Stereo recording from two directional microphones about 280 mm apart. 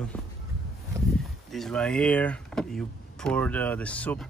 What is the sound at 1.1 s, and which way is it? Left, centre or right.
Speech, centre.